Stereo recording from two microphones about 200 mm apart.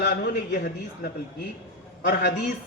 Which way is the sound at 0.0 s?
50° left (ahead or behind).